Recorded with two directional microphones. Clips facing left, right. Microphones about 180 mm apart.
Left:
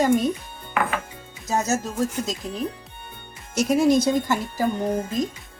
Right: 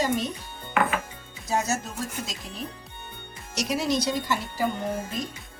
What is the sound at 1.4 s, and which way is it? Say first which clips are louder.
A woman's voice: left 3 dB; 45° left (ahead or behind).